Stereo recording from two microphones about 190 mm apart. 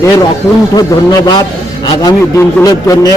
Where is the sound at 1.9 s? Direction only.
20° left (ahead or behind).